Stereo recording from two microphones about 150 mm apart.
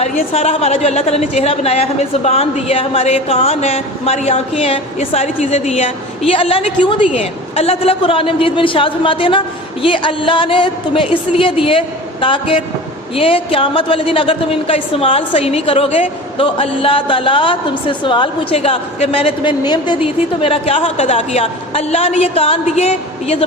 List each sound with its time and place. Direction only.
0.3 s a woman's voice: 45° left (ahead or behind)